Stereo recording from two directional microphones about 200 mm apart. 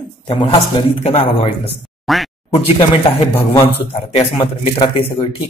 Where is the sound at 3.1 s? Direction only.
25° left (ahead or behind).